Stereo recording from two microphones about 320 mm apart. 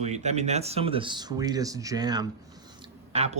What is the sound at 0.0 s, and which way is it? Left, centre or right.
Speech, right.